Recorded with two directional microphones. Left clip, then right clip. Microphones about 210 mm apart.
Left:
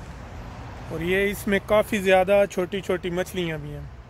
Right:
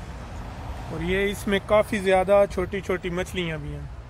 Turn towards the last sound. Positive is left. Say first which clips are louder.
# left 1 dB
turn(degrees=25)  # may be behind; listen again after turning